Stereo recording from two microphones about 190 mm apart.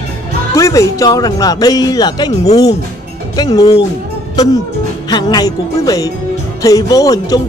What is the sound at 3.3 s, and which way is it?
Speech, 20° left (ahead or behind).